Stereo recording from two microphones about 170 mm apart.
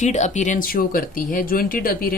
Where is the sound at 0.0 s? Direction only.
45° left (ahead or behind).